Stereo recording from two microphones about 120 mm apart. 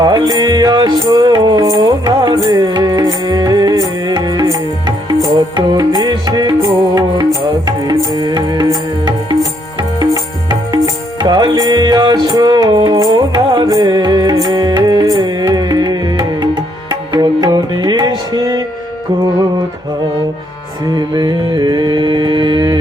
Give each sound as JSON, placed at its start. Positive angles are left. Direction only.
{"t": 0.0, "sound": "music", "side_deg": -35}
{"t": 21.2, "sound": "mantra", "side_deg": -35}